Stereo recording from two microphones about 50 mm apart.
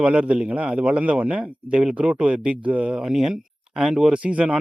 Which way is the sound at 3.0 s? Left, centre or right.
Centre.